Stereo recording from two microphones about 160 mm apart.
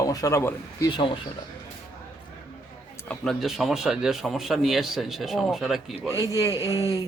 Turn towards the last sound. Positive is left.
turn(degrees=20)  # may be behind; listen again after turning